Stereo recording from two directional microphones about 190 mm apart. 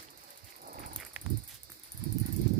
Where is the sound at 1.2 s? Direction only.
5° right (ahead or behind).